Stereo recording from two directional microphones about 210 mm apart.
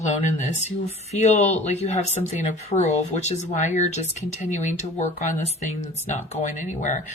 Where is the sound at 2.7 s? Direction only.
35° left (ahead or behind).